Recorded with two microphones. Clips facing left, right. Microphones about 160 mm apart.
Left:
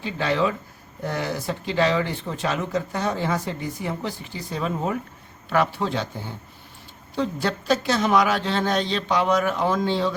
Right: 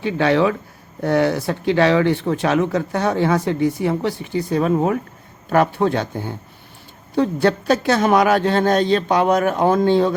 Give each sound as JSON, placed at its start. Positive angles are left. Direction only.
{"t": 0.0, "sound": "a woman's voice", "side_deg": -65}